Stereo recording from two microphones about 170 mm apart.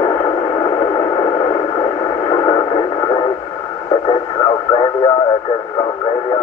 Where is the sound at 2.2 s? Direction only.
35° left (ahead or behind).